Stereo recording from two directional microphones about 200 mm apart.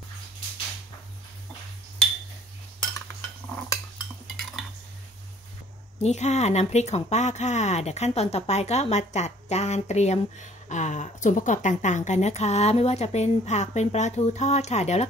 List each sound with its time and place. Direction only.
3.2 s cutlery: 15° left (ahead or behind)
4.4 s cutlery: centre (ahead or behind)
6.0 s speech: 35° left (ahead or behind)